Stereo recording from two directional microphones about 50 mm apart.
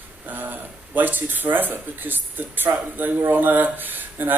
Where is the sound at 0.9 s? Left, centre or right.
Right.